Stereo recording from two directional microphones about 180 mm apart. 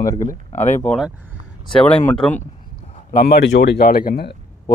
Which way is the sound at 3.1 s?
60° left (ahead or behind).